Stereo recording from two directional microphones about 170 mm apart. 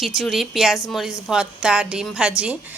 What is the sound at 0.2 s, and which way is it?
A woman's voice, centre (ahead or behind).